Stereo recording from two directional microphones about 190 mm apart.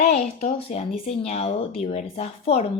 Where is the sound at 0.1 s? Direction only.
35° left (ahead or behind).